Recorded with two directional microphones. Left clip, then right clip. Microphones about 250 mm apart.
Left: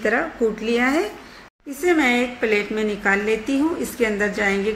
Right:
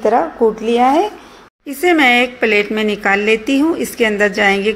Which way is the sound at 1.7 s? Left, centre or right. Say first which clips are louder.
Right 7 dB; right.